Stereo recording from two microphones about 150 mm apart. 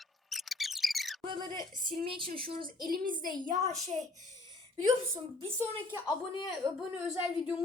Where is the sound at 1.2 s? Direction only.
30° right (ahead or behind).